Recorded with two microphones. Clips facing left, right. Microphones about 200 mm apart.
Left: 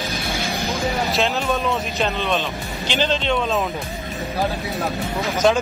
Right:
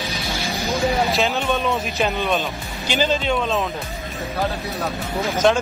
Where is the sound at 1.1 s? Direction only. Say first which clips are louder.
Even; centre (ahead or behind).